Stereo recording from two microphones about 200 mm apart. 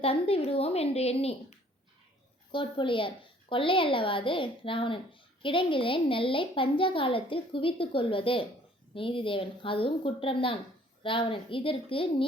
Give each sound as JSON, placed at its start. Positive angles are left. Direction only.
{"t": 0.0, "sound": "a woman's voice", "side_deg": 30}